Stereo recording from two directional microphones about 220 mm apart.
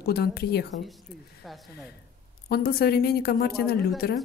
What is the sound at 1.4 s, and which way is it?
Speech, centre (ahead or behind).